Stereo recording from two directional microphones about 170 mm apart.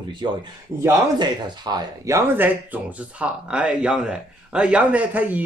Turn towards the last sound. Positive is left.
turn(degrees=-10)  # may be behind; listen again after turning